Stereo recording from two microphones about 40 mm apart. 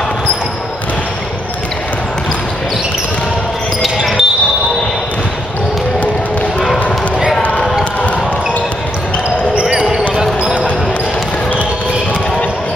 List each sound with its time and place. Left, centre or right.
3.8 s basketball bounce: centre
9.6 s basketball bounce: right